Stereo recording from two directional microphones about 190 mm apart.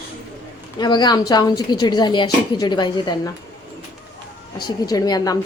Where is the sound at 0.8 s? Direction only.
20° left (ahead or behind).